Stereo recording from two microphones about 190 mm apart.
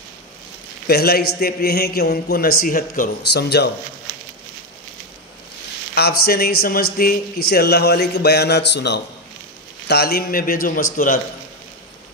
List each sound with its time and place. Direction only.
0.8 s a man's voice: 55° left (ahead or behind)
5.9 s a man's voice: 55° left (ahead or behind)